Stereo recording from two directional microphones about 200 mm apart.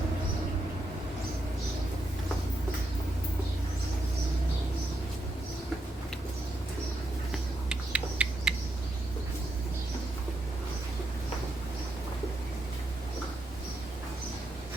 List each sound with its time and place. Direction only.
7.7 s owl: 5° right (ahead or behind)